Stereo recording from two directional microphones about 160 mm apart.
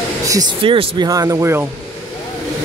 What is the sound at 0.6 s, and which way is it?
Speech, 30° right (ahead or behind).